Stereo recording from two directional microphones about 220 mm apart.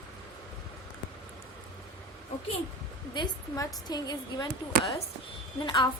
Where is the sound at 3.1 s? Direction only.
20° left (ahead or behind).